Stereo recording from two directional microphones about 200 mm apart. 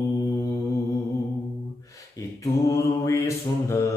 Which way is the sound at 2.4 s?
15° left (ahead or behind).